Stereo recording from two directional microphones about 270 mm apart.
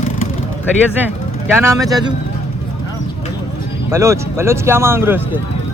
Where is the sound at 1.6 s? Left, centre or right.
Centre.